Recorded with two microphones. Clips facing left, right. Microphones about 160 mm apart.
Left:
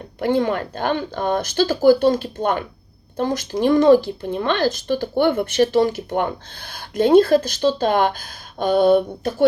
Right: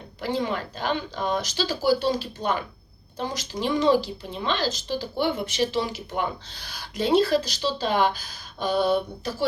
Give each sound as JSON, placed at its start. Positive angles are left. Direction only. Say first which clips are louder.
{"t": 0.2, "sound": "speech", "louder": "left 8 dB", "side_deg": 55}